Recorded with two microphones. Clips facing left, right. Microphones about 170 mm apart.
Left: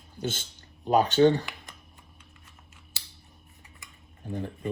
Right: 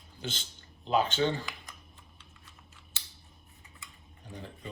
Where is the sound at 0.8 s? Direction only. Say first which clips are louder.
Left 7 dB; 50° left (ahead or behind).